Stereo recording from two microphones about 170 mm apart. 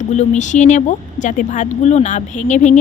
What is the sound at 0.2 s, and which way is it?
A woman's voice, 45° left (ahead or behind).